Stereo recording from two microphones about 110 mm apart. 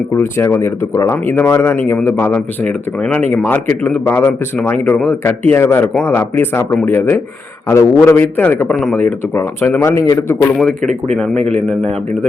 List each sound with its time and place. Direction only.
0.2 s a man's voice: 20° left (ahead or behind)
9.3 s speech: 25° left (ahead or behind)